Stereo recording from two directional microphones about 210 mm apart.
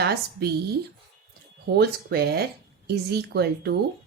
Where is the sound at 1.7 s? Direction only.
50° right (ahead or behind).